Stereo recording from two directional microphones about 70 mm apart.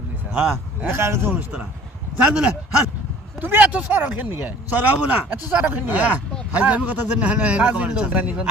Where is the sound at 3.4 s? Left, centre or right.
Right.